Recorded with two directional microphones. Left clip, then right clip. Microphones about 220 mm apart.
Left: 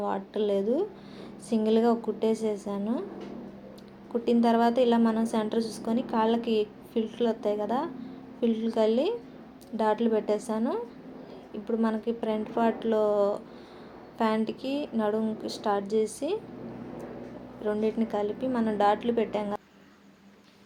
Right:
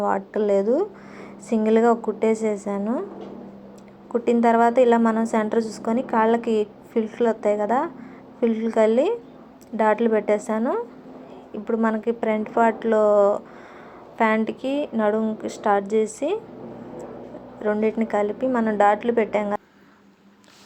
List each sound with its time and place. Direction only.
0.1 s a woman's voice: 5° right (ahead or behind)
0.6 s a woman's voice: 15° right (ahead or behind)
4.3 s a woman's voice: 15° right (ahead or behind)
17.6 s a woman's voice: 10° right (ahead or behind)